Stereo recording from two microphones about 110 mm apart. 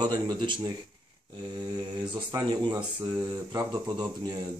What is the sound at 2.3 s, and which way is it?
Speech, 40° right (ahead or behind).